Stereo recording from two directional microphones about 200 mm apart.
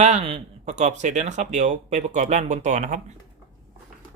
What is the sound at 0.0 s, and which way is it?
Speech, 35° right (ahead or behind).